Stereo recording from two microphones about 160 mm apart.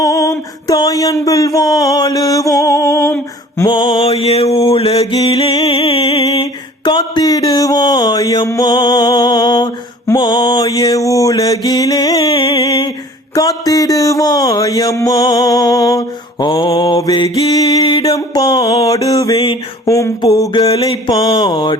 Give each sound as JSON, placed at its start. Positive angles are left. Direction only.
{"t": 0.0, "sound": "mantra", "side_deg": 20}
{"t": 12.3, "sound": "a sound", "side_deg": 35}
{"t": 13.3, "sound": "speech", "side_deg": 20}
{"t": 14.9, "sound": "mantra", "side_deg": 20}
{"t": 19.4, "sound": "mantra", "side_deg": 35}
{"t": 19.9, "sound": "mantra", "side_deg": 20}
{"t": 20.8, "sound": "mantra", "side_deg": 35}